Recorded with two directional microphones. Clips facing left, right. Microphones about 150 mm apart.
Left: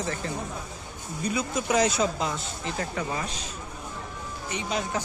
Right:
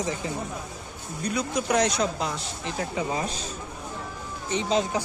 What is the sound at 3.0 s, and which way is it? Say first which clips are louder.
Speech: right 5 dB; 20° right (ahead or behind).